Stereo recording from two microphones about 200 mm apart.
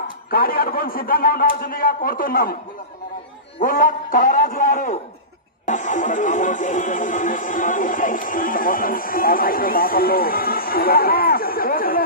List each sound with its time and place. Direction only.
0.3 s speech: 45° left (ahead or behind)
3.6 s a man's voice: 40° left (ahead or behind)